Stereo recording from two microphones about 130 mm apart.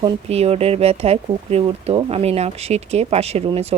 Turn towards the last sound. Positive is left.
turn(degrees=-55)  # may be behind; listen again after turning